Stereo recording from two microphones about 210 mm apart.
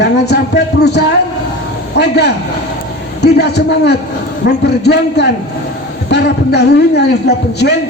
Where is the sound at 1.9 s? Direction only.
55° left (ahead or behind).